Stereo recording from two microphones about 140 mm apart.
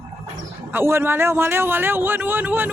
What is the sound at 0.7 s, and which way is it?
A man's voice, 15° right (ahead or behind).